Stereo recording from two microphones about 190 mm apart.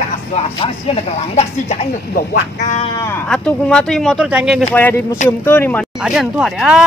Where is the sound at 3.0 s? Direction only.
10° left (ahead or behind).